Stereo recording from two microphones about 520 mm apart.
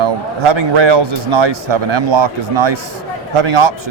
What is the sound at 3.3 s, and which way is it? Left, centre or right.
Speech, right.